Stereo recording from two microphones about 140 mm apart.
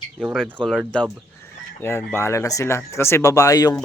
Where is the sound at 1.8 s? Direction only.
15° left (ahead or behind).